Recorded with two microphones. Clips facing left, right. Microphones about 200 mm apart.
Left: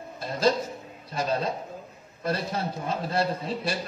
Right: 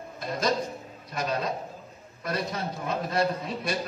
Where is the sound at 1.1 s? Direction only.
30° left (ahead or behind).